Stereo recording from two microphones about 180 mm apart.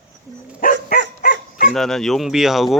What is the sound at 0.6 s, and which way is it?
Dog, 50° left (ahead or behind).